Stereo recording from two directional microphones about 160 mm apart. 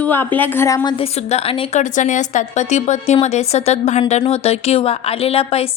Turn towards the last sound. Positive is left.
turn(degrees=40)  # may be behind; listen again after turning